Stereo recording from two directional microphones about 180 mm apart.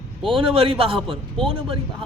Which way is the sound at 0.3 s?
30° right (ahead or behind).